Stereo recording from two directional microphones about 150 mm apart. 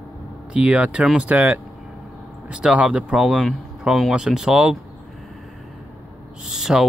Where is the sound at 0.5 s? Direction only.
5° right (ahead or behind).